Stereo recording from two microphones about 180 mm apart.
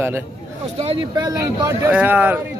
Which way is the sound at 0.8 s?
25° right (ahead or behind).